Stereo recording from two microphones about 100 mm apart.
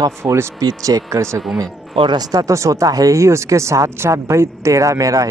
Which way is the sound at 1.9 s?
55° right (ahead or behind).